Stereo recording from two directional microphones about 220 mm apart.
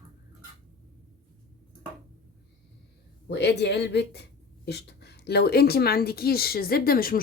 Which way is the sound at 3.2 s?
50° left (ahead or behind).